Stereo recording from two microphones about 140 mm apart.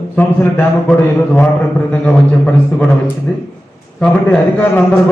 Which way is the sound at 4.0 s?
10° left (ahead or behind).